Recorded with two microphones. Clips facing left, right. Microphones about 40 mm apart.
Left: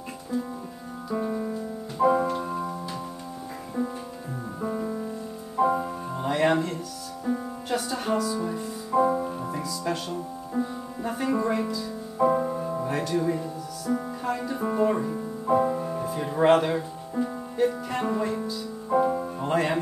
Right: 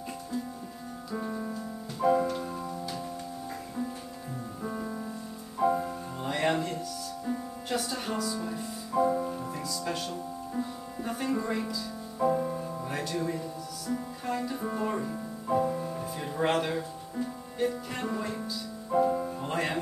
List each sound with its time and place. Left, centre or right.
1.1 s music: centre
4.6 s music: centre
8.9 s music: left
11.0 s music: centre
12.2 s music: left
13.0 s music: centre
17.6 s music: centre